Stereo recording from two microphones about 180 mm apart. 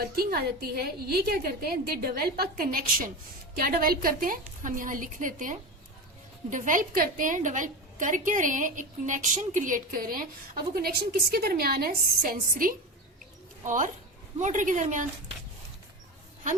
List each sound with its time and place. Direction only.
0.0 s a woman's voice: 60° right (ahead or behind)